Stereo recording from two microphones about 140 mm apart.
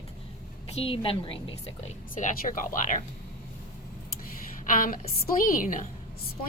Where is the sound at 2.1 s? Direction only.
75° left (ahead or behind).